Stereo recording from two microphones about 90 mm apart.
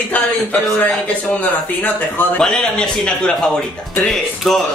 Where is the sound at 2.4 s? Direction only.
10° left (ahead or behind).